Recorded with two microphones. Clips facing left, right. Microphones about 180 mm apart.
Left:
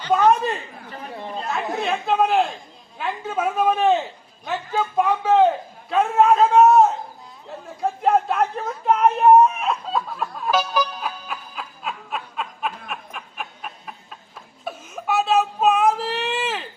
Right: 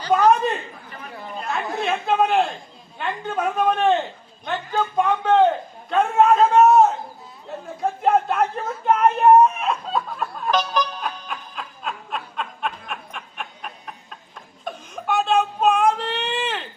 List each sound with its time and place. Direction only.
0.1 s a man's voice: centre (ahead or behind)
0.9 s chatter: 30° left (ahead or behind)
1.5 s a man's voice: centre (ahead or behind)
7.4 s a sound: centre (ahead or behind)